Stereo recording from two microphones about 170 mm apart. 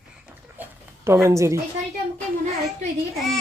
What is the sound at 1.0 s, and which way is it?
Speech, 15° right (ahead or behind).